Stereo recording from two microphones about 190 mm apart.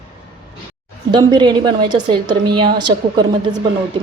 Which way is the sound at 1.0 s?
20° right (ahead or behind).